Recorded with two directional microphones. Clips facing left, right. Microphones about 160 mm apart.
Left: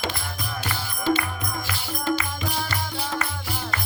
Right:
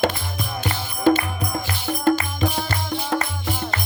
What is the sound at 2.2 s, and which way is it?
Music, 40° right (ahead or behind).